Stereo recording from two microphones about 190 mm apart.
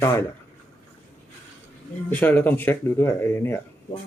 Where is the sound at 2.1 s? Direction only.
10° left (ahead or behind).